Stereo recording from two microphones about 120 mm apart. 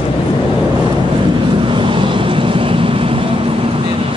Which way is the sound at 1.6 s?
45° right (ahead or behind).